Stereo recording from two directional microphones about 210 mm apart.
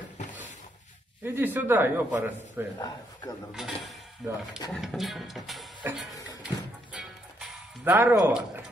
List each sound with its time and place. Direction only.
0.2 s a sound: 35° left (ahead or behind)
1.2 s a man's voice: 10° right (ahead or behind)
3.5 s music: centre (ahead or behind)
7.9 s a man's voice: 10° right (ahead or behind)